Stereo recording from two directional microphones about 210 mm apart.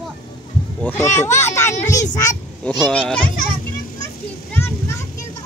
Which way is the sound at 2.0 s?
35° left (ahead or behind).